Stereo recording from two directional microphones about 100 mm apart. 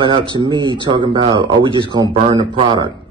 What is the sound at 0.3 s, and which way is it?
Speech, 50° right (ahead or behind).